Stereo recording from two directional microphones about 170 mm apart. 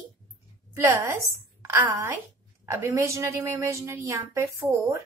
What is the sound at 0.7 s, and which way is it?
A woman's voice, 15° right (ahead or behind).